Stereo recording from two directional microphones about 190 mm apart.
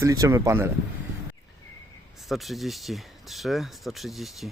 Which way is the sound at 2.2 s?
Centre (ahead or behind).